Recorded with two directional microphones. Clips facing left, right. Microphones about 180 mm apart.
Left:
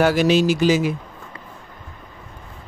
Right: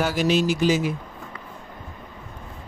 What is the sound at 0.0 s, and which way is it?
Speech, 75° left (ahead or behind).